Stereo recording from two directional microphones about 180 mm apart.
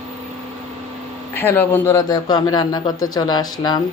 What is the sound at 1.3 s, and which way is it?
Speech, 10° left (ahead or behind).